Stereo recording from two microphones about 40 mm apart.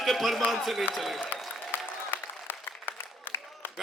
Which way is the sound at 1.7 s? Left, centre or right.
Left.